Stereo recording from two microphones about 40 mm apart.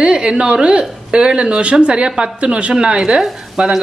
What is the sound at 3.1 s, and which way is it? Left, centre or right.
Speech, centre.